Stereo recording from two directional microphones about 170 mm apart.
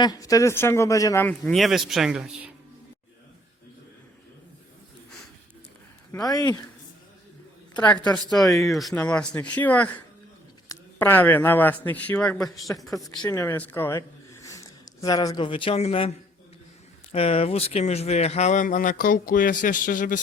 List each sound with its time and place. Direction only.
0.0 s speech: 20° left (ahead or behind); by 2.5 s 5° right (ahead or behind)
6.2 s a woman's voice: 20° left (ahead or behind)
8.0 s speech: 5° left (ahead or behind)
10.9 s speech: 10° left (ahead or behind)
12.9 s speech: 20° left (ahead or behind); by 20.2 s 50° left (ahead or behind)